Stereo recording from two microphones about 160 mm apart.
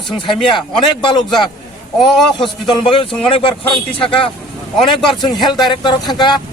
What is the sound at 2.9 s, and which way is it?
A man's voice, 30° left (ahead or behind).